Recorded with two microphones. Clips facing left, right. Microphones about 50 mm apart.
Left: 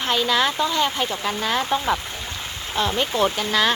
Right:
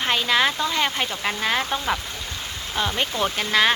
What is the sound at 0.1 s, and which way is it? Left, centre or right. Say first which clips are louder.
Speech: left 1 dB; right.